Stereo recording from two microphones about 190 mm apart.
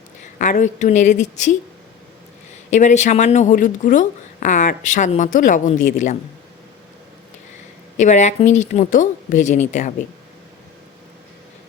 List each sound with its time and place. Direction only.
0.3 s a woman's voice: 40° left (ahead or behind)
2.6 s a woman's voice: 40° left (ahead or behind)
7.9 s a woman's voice: 40° left (ahead or behind)